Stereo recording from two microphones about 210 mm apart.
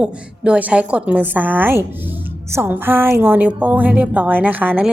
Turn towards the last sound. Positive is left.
turn(degrees=-5)  # may be behind; listen again after turning